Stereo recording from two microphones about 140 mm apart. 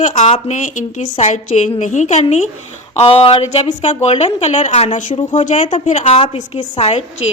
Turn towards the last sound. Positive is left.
turn(degrees=50)  # may be behind; listen again after turning